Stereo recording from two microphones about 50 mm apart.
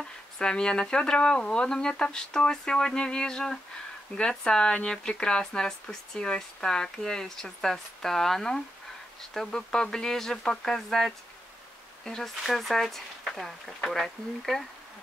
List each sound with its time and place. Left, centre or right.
0.4 s speech: centre
12.4 s speech: centre